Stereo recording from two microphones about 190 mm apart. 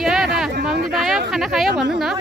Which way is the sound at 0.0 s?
Centre (ahead or behind).